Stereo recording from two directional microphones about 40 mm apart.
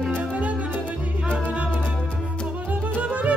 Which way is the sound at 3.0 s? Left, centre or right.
Right.